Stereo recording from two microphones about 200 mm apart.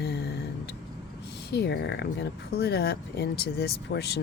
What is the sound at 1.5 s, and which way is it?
A woman's voice, 55° left (ahead or behind).